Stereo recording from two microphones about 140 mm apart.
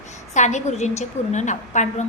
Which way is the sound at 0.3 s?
55° left (ahead or behind).